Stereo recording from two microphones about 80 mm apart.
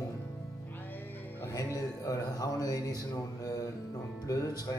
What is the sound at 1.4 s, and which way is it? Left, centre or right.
Speech, left.